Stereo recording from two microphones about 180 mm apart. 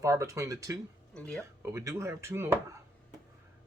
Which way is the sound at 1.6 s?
15° right (ahead or behind).